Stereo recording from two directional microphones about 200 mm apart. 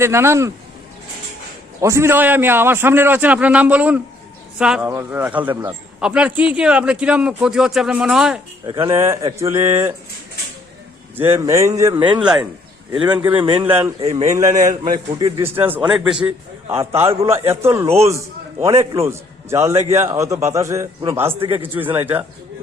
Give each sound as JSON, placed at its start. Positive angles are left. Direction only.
{"t": 0.0, "sound": "a man's voice", "side_deg": -15}
{"t": 1.8, "sound": "a man's voice", "side_deg": -15}
{"t": 8.6, "sound": "speech", "side_deg": -25}
{"t": 9.4, "sound": "a man's voice", "side_deg": -15}
{"t": 11.2, "sound": "a man's voice", "side_deg": -15}
{"t": 12.2, "sound": "speech", "side_deg": -5}
{"t": 13.3, "sound": "speech", "side_deg": -25}
{"t": 14.3, "sound": "a man's voice", "side_deg": -15}
{"t": 21.4, "sound": "speech", "side_deg": -25}
{"t": 21.9, "sound": "a man's voice", "side_deg": -10}